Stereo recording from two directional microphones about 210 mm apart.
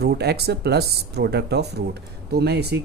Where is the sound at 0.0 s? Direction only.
50° right (ahead or behind).